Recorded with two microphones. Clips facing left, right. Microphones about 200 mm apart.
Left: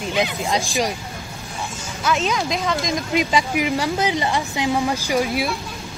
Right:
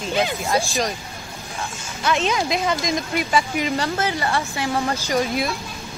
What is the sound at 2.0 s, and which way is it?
Speech, centre (ahead or behind).